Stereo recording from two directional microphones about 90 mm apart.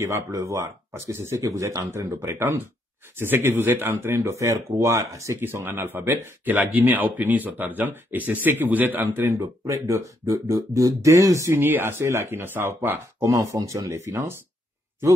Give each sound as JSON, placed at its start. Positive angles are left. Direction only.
{"t": 0.0, "sound": "speech", "side_deg": -35}
{"t": 1.9, "sound": "speech", "side_deg": -25}
{"t": 5.4, "sound": "speech", "side_deg": -20}
{"t": 9.7, "sound": "speech", "side_deg": -35}
{"t": 11.6, "sound": "speech", "side_deg": -25}
{"t": 13.2, "sound": "speech", "side_deg": -35}